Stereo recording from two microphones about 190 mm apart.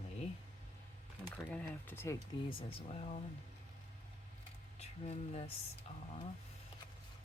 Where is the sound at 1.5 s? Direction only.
10° left (ahead or behind).